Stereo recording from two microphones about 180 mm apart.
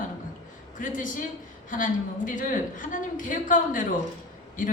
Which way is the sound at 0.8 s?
45° left (ahead or behind).